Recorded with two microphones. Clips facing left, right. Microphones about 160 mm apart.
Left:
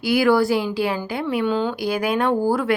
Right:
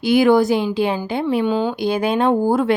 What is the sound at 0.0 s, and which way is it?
A woman's voice, 20° right (ahead or behind).